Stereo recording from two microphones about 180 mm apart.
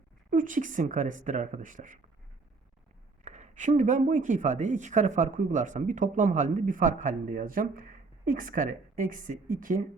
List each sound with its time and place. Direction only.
0.3 s speech: 45° right (ahead or behind)
3.2 s speech: 40° right (ahead or behind)